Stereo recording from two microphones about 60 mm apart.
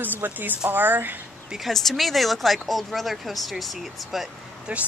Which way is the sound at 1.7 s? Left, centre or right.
Centre.